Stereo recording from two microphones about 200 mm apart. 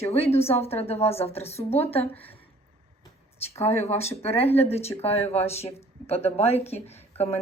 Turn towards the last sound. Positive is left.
turn(degrees=30)  # may be behind; listen again after turning